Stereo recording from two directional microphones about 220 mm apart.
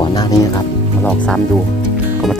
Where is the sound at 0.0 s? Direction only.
20° left (ahead or behind).